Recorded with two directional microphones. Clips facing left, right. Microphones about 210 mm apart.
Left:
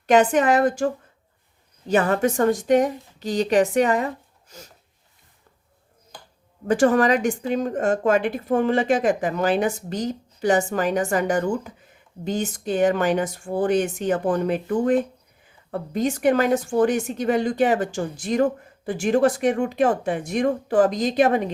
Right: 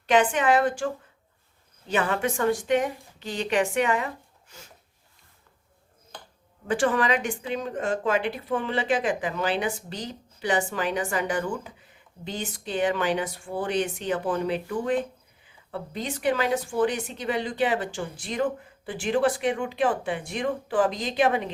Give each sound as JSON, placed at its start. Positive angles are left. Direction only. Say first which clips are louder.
{"t": 0.1, "sound": "a woman's voice", "louder": "left 4 dB", "side_deg": 40}
{"t": 1.9, "sound": "a woman's voice", "louder": "left 6 dB", "side_deg": 40}
{"t": 6.7, "sound": "a woman's voice", "louder": "left 6 dB", "side_deg": 45}